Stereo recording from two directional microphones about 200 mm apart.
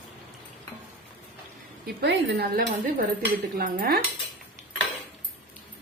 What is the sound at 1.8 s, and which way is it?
Speech, 55° right (ahead or behind).